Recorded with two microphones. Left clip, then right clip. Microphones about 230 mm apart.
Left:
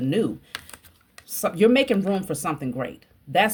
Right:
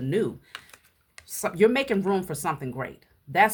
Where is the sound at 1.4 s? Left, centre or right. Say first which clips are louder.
Left 3 dB; centre.